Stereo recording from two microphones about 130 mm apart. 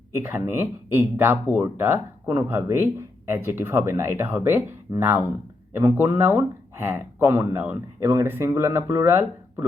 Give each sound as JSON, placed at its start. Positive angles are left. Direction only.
{"t": 0.2, "sound": "speech", "side_deg": -15}